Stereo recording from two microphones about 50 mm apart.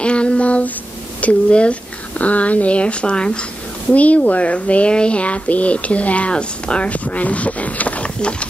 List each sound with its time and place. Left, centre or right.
0.0 s child singing: left
1.2 s speech: left